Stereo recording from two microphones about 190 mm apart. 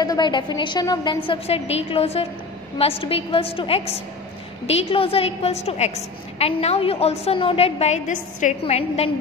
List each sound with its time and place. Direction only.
0.0 s a woman's voice: 20° left (ahead or behind)